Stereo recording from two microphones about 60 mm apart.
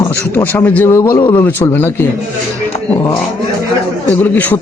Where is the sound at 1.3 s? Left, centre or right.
Left.